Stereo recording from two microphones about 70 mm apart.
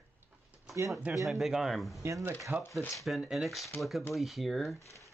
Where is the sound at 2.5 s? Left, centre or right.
Right.